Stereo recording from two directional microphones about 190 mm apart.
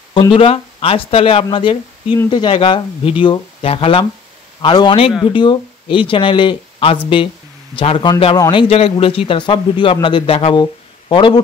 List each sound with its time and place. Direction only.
0.1 s a man's voice: 30° left (ahead or behind)